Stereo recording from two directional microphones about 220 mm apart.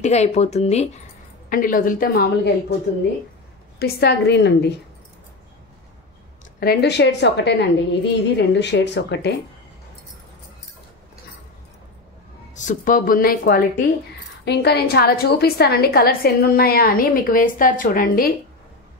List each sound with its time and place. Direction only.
0.0 s speech: 30° left (ahead or behind)
3.8 s a woman's voice: 50° left (ahead or behind)
6.6 s a woman's voice: 45° left (ahead or behind)
12.5 s a woman's voice: 35° left (ahead or behind)